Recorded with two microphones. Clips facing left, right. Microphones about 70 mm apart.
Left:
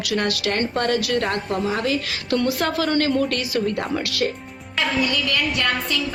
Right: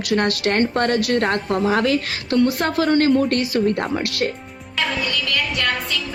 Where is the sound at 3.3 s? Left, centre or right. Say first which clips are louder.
Right 4 dB; right.